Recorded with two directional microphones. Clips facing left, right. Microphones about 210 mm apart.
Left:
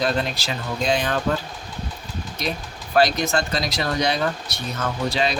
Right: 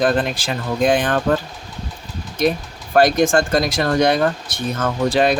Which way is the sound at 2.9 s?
50° right (ahead or behind).